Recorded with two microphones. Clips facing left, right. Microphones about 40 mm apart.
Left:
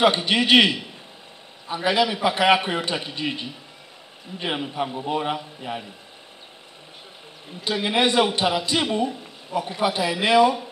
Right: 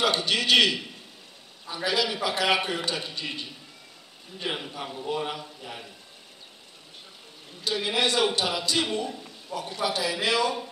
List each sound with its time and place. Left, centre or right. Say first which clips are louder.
0.0 s a man's voice: left 6 dB; left
7.6 s a man's voice: left 4 dB; left